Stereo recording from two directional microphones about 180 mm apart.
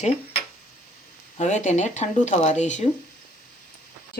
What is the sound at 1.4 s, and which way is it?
Speech, 40° left (ahead or behind).